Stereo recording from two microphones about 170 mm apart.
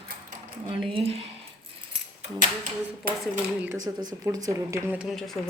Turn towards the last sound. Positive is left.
turn(degrees=0)  # may be behind; listen again after turning